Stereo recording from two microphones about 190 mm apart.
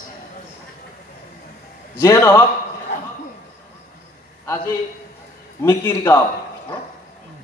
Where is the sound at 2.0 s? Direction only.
15° left (ahead or behind).